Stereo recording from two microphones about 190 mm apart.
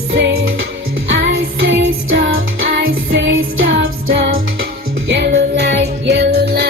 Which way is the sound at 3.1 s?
70° right (ahead or behind).